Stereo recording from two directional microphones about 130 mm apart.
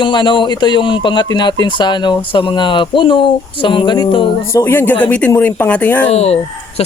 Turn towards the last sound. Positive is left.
turn(degrees=55)  # may be behind; listen again after turning